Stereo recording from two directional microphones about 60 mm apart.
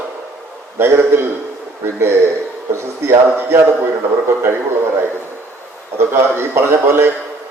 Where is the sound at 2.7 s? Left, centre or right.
Right.